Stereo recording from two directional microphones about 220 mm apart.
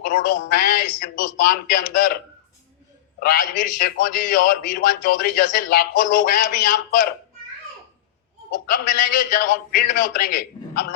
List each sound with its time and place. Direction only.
0.0 s a man's voice: 40° left (ahead or behind)
3.2 s a man's voice: 40° left (ahead or behind)
8.5 s a man's voice: 35° left (ahead or behind)